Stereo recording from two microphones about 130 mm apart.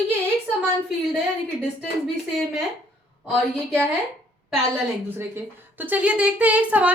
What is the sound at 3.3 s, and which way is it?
Speech, centre (ahead or behind).